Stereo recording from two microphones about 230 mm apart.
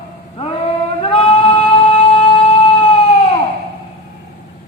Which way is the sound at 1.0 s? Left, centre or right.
Left.